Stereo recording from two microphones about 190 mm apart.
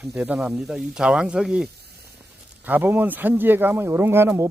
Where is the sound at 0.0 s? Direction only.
5° right (ahead or behind).